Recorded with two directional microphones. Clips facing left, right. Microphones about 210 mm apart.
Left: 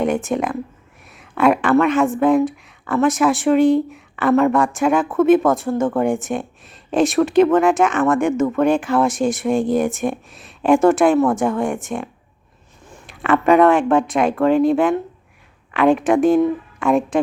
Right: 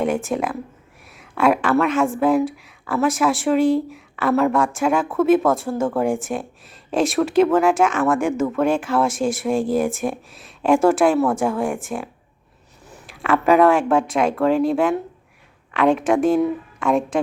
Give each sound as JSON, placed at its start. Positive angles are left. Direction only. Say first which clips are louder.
{"t": 0.3, "sound": "a woman's voice", "louder": "left 2 dB", "side_deg": -5}
{"t": 13.1, "sound": "speech", "louder": "left 2 dB", "side_deg": 0}